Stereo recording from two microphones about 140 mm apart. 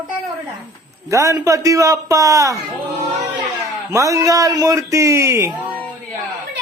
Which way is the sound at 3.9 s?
20° right (ahead or behind).